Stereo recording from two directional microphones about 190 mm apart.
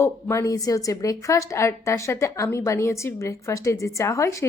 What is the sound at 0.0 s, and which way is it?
A woman's voice, 15° left (ahead or behind).